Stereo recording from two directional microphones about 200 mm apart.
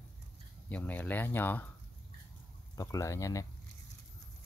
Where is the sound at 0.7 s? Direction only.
10° left (ahead or behind).